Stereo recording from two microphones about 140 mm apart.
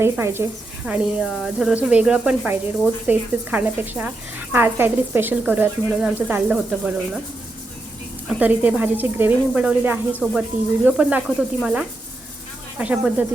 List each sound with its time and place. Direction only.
0.0 s speech: 15° right (ahead or behind)
8.4 s speech: 10° right (ahead or behind)